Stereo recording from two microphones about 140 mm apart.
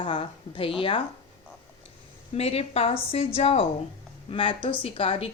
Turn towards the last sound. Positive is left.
turn(degrees=40)  # may be behind; listen again after turning